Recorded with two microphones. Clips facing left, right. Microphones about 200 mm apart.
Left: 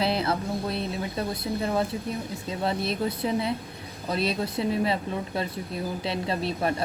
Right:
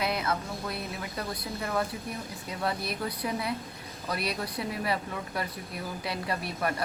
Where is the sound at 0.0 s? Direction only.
30° left (ahead or behind).